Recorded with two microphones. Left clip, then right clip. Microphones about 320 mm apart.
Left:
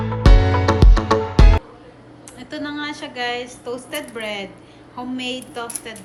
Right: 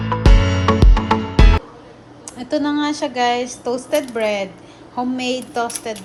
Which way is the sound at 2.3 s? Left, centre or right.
Centre.